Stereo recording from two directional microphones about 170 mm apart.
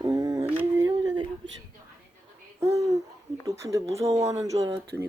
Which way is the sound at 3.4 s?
20° right (ahead or behind).